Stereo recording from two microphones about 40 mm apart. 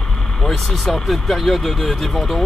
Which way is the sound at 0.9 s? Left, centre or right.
Centre.